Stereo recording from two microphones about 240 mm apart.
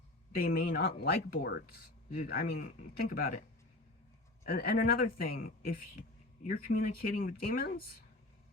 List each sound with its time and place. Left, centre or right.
0.3 s speech: left
4.4 s speech: left
6.5 s speech: left